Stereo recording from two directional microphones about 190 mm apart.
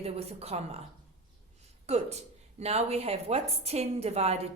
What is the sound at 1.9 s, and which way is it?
Speech, 35° right (ahead or behind).